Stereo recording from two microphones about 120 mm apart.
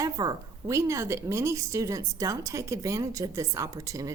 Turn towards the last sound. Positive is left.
turn(degrees=-30)  # may be behind; listen again after turning